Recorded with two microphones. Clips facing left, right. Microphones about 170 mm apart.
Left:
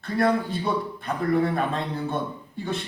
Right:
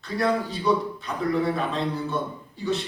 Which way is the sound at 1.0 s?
55° left (ahead or behind).